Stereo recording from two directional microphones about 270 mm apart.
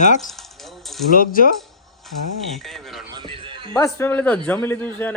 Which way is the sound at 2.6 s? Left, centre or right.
Centre.